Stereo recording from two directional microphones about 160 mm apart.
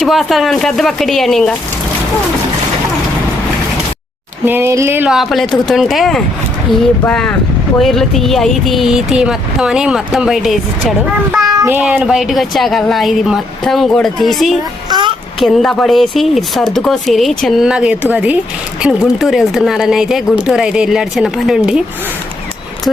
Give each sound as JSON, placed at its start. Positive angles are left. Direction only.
{"t": 0.0, "sound": "speech", "side_deg": 0}
{"t": 4.4, "sound": "speech", "side_deg": -15}
{"t": 5.1, "sound": "speech", "side_deg": 0}
{"t": 11.4, "sound": "speech", "side_deg": -20}
{"t": 14.8, "sound": "a child's voice", "side_deg": -30}
{"t": 15.4, "sound": "speech", "side_deg": 0}